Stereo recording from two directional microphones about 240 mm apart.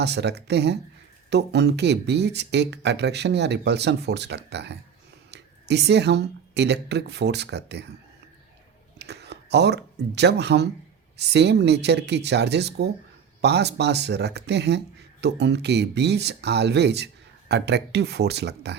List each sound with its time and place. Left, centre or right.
0.0 s speech: right
9.0 s speech: right